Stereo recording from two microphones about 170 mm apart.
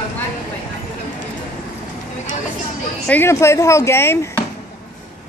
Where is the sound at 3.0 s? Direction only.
10° left (ahead or behind).